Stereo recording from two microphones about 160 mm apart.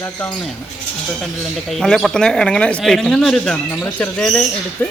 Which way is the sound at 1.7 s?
Centre (ahead or behind).